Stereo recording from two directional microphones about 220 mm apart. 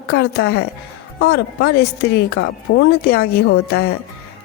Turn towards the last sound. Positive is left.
turn(degrees=45)  # may be behind; listen again after turning